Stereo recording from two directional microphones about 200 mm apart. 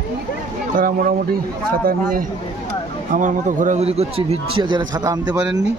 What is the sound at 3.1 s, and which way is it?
A man's voice, 40° right (ahead or behind).